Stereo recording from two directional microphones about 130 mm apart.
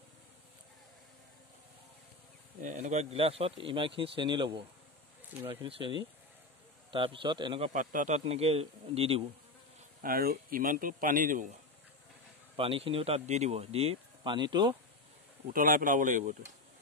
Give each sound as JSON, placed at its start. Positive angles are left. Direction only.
{"t": 2.6, "sound": "speech", "side_deg": -60}
{"t": 7.7, "sound": "a man's voice", "side_deg": -85}
{"t": 8.3, "sound": "speech", "side_deg": -50}
{"t": 10.0, "sound": "speech", "side_deg": -90}
{"t": 12.5, "sound": "speech", "side_deg": -45}
{"t": 15.4, "sound": "speech", "side_deg": -90}